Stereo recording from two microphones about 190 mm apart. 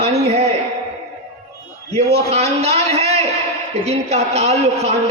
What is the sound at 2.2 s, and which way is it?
A man's voice, 35° right (ahead or behind).